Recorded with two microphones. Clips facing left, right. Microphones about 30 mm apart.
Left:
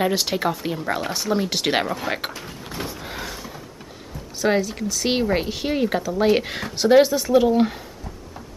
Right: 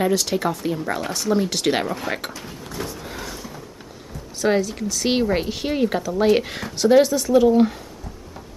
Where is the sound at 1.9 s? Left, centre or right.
Centre.